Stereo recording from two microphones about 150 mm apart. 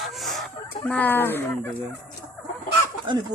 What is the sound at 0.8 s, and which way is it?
Speech, 10° left (ahead or behind).